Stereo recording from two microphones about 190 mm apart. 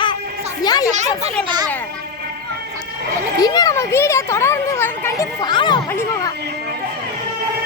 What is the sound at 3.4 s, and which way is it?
A child's voice, 20° left (ahead or behind).